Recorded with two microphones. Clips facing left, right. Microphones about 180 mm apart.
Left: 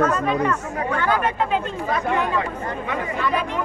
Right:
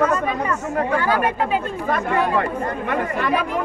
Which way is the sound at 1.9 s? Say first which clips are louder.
Right 2 dB; 55° right (ahead or behind).